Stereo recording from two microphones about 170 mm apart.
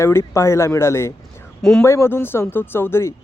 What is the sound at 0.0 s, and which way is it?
Speech, 15° left (ahead or behind).